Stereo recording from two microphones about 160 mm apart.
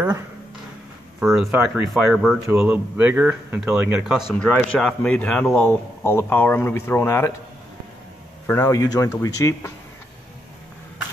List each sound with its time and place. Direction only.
1.2 s speech: centre (ahead or behind)
4.3 s speech: 10° left (ahead or behind)
8.5 s speech: 20° left (ahead or behind)